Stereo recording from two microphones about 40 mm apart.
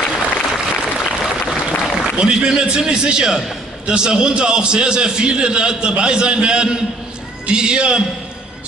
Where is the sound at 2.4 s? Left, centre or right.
Right.